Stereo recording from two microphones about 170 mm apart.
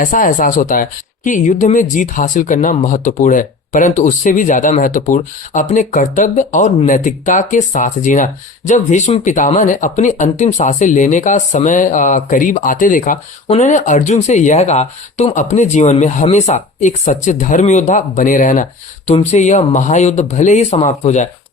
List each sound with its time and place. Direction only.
0.0 s speech: 50° left (ahead or behind)